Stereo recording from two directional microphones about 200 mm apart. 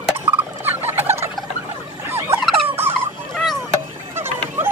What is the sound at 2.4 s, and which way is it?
Turkey, centre (ahead or behind).